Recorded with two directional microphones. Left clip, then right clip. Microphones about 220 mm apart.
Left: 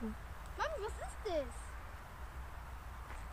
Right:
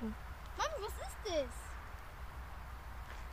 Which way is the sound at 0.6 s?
50° right (ahead or behind).